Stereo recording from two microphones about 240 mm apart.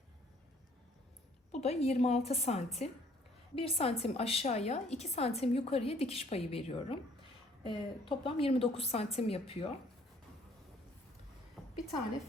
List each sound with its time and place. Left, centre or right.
1.5 s a woman's voice: left